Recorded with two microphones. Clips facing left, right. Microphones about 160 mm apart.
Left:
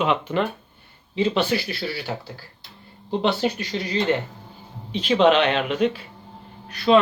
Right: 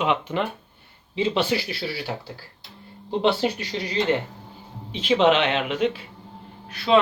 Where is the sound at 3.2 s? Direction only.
25° right (ahead or behind).